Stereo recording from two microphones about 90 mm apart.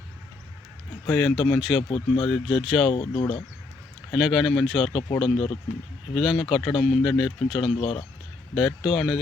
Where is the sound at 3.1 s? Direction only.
45° left (ahead or behind).